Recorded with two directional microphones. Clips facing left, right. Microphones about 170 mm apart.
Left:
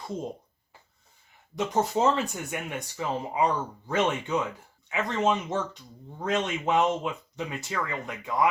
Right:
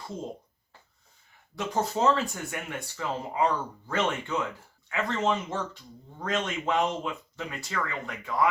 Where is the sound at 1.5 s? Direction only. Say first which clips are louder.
Left 3 dB; 20° left (ahead or behind).